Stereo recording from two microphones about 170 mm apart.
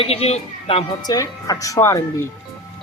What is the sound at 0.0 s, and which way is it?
A child's voice, 35° left (ahead or behind).